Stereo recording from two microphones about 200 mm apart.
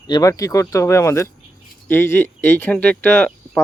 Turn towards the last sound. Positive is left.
turn(degrees=10)  # may be behind; listen again after turning